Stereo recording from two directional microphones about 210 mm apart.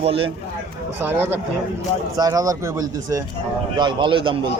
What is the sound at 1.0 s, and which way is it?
A man's voice, 10° right (ahead or behind).